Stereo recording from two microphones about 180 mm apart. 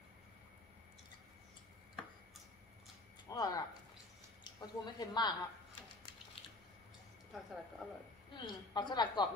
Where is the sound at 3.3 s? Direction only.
20° left (ahead or behind).